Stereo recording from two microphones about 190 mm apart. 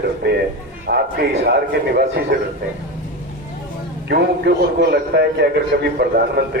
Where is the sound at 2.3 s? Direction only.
65° right (ahead or behind).